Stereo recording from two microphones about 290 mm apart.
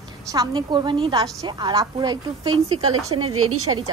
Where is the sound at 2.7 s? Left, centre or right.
Right.